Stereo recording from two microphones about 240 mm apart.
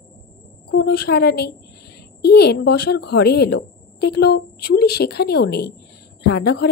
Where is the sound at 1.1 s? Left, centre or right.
Left.